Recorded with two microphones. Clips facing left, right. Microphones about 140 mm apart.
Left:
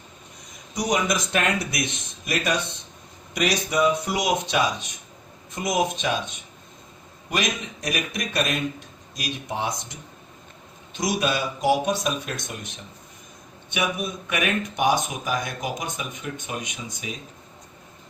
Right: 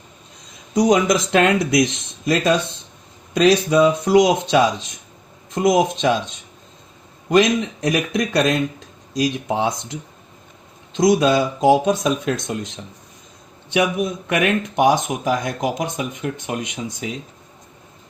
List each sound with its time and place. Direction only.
0.9 s speech: 90° right
3.7 s speech: 85° right
10.9 s speech: 90° right